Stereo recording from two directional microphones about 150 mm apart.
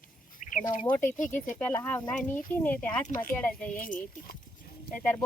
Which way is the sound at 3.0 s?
65° left (ahead or behind).